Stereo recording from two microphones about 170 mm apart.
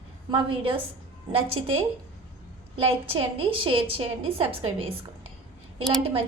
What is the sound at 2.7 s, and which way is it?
A woman's voice, 35° right (ahead or behind).